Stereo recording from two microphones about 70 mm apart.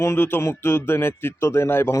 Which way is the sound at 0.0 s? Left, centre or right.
Left.